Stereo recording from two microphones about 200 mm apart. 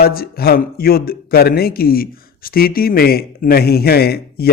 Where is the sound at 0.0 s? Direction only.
50° left (ahead or behind).